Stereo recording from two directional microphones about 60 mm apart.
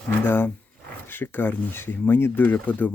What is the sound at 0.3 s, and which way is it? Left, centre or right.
Speech, left.